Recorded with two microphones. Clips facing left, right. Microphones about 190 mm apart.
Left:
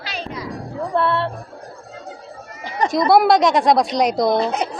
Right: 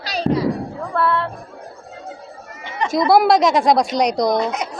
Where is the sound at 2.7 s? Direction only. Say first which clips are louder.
Left 3 dB; 40° left (ahead or behind).